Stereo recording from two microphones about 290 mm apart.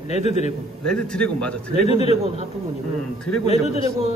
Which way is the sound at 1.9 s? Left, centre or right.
Left.